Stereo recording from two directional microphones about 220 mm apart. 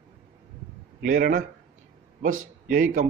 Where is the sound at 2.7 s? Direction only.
35° right (ahead or behind).